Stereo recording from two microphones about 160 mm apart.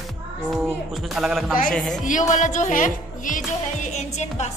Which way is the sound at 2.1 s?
50° left (ahead or behind).